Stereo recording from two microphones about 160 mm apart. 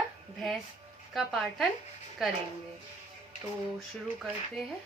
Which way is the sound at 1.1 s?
Centre (ahead or behind).